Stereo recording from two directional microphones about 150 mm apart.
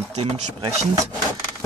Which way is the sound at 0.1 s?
40° right (ahead or behind).